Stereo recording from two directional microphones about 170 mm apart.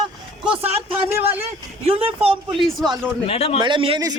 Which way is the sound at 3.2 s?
35° left (ahead or behind).